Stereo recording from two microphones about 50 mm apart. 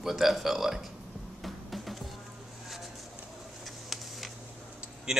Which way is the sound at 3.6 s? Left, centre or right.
Centre.